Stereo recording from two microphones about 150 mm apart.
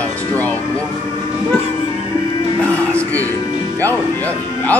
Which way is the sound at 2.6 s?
10° left (ahead or behind).